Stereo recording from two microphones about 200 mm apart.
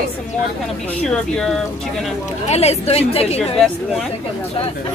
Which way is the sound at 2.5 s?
30° left (ahead or behind).